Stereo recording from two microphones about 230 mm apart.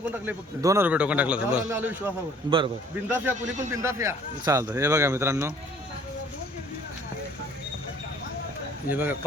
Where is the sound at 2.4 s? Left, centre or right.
Right.